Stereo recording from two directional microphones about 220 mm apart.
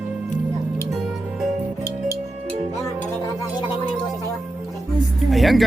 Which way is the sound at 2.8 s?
15° left (ahead or behind).